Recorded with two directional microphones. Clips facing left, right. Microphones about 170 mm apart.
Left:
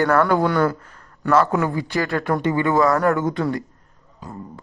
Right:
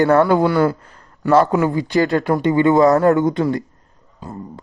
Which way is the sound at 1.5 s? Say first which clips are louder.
Right 5 dB; 20° right (ahead or behind).